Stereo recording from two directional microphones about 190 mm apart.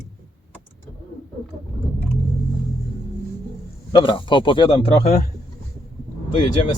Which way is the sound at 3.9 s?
25° left (ahead or behind).